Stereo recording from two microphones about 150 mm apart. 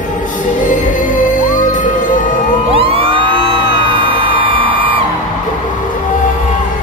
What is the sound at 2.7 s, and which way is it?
Music, 40° right (ahead or behind).